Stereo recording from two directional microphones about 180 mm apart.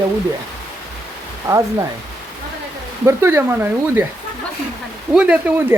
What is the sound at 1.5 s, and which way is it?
Speech, 20° right (ahead or behind).